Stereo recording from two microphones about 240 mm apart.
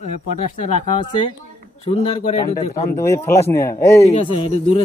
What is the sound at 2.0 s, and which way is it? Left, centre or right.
Speech, left.